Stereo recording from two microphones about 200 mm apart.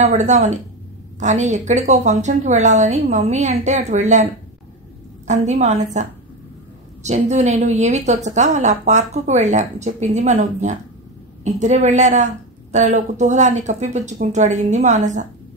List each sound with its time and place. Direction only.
0.0 s a woman's voice: 35° right (ahead or behind)
7.0 s a woman's voice: 35° right (ahead or behind)